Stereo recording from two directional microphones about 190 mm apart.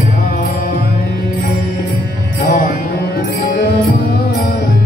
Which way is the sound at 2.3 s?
50° left (ahead or behind).